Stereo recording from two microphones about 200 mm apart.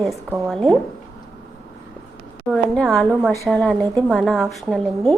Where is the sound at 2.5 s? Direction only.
5° left (ahead or behind).